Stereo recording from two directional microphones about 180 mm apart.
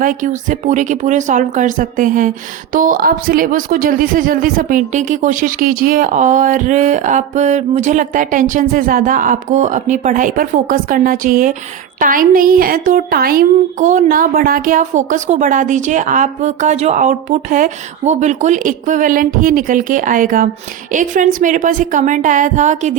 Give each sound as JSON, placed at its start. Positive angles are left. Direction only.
{"t": 0.0, "sound": "a woman's voice", "side_deg": -50}